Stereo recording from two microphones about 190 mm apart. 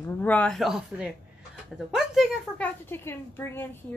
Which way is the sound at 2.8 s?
10° left (ahead or behind).